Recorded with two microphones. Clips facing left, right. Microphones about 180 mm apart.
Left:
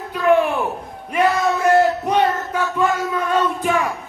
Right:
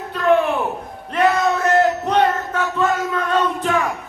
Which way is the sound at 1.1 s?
10° left (ahead or behind).